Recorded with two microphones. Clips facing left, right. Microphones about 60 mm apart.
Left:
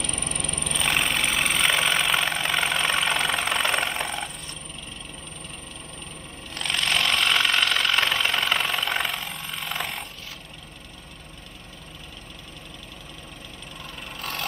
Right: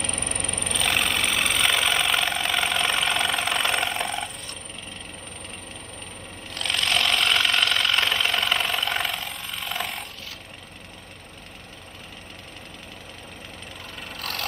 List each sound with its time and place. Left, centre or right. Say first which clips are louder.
0.5 s vehicle: even; centre
6.5 s vehicle: even; centre
14.1 s vehicle: even; centre